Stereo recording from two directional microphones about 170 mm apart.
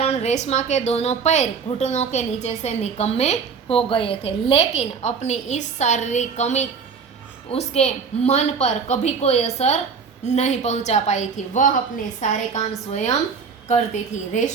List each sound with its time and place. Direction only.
0.0 s a woman's voice: 40° left (ahead or behind)